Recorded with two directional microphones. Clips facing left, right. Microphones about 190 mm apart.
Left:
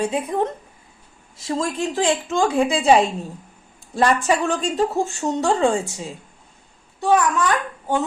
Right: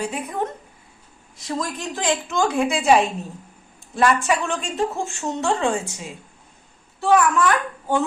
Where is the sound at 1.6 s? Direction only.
30° left (ahead or behind).